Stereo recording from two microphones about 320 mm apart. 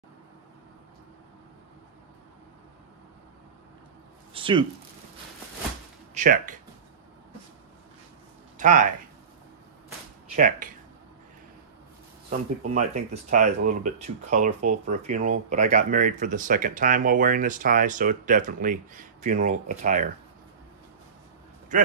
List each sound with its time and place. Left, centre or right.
4.3 s speech: centre
6.1 s speech: right
8.5 s speech: right
10.3 s speech: right
12.3 s speech: right